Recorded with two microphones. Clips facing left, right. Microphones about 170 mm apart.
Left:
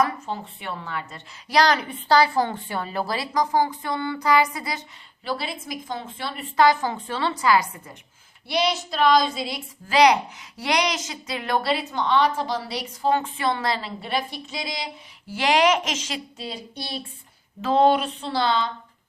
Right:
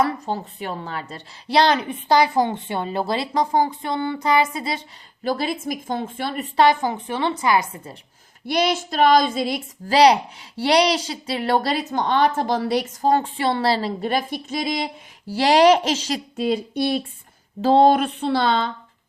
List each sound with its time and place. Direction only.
0.0 s a woman's voice: 35° right (ahead or behind)
5.2 s a sound: 45° right (ahead or behind)
6.6 s a woman's voice: 25° right (ahead or behind)
8.4 s a sound: 50° right (ahead or behind)
9.9 s a woman's voice: 35° right (ahead or behind); by 14.8 s 50° right (ahead or behind)
15.3 s a woman's voice: 35° right (ahead or behind)
16.4 s a woman's voice: 55° right (ahead or behind)
17.6 s a woman's voice: 35° right (ahead or behind)
17.9 s a woman's voice: 55° right (ahead or behind)